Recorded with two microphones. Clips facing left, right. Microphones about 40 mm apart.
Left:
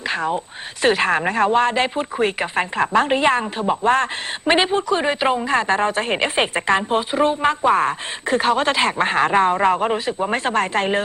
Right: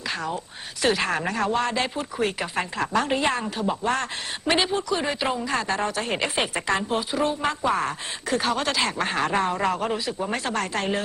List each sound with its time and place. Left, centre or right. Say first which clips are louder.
0.1 s speech: left 7 dB; left